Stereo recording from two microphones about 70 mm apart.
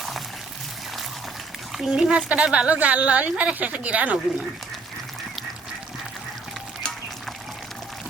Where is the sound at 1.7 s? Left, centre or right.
Centre.